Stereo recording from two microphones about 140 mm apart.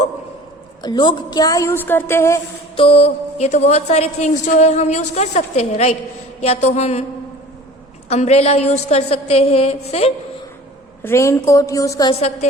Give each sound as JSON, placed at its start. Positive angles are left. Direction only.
{"t": 0.8, "sound": "a woman's voice", "side_deg": 30}
{"t": 2.7, "sound": "a woman's voice", "side_deg": 45}
{"t": 8.1, "sound": "a woman's voice", "side_deg": 50}
{"t": 11.0, "sound": "a woman's voice", "side_deg": 20}